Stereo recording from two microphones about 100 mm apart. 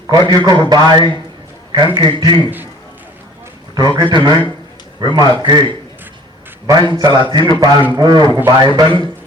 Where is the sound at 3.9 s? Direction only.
50° right (ahead or behind).